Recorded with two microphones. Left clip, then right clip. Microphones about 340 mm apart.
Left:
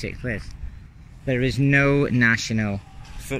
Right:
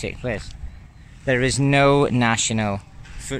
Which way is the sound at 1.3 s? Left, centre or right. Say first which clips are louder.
Right 2 dB; centre.